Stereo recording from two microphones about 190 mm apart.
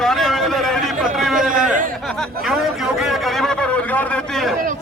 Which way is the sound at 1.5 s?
45° right (ahead or behind).